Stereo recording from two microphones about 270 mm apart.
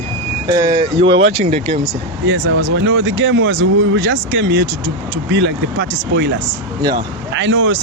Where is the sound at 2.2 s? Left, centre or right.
Right.